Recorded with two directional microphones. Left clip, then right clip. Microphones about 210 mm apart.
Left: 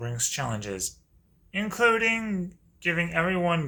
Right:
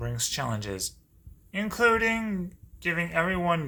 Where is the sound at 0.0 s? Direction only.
15° right (ahead or behind).